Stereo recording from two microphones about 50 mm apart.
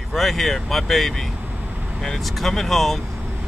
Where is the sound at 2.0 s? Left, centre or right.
Centre.